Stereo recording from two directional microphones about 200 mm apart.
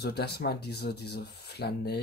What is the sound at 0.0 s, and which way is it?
Speech, 55° left (ahead or behind).